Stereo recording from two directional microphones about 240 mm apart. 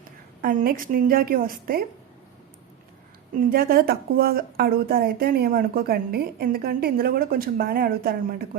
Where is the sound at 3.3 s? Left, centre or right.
Right.